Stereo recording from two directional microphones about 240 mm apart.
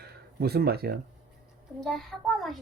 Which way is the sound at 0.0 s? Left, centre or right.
Right.